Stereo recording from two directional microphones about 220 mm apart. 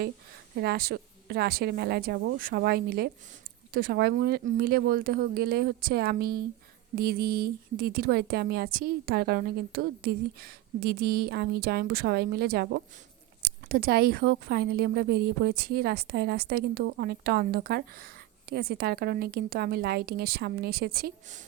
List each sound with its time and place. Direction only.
0.5 s a woman's voice: 45° right (ahead or behind)